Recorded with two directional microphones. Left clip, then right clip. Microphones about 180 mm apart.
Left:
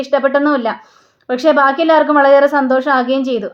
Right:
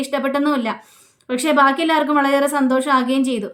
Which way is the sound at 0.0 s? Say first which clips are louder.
Left 7 dB; 15° right (ahead or behind).